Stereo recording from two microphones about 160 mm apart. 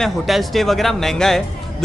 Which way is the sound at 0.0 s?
Centre (ahead or behind).